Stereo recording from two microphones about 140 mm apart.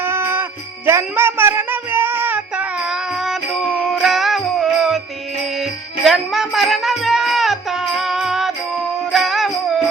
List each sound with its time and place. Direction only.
0.0 s jingle bell: 15° right (ahead or behind)
0.9 s music: 15° right (ahead or behind); by 4.9 s centre (ahead or behind)
6.1 s music: centre (ahead or behind)